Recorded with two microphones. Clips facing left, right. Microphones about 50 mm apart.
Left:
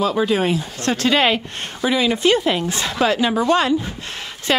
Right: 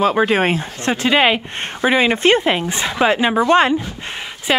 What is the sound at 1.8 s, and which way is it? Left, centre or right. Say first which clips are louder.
Speech: right 3 dB; right.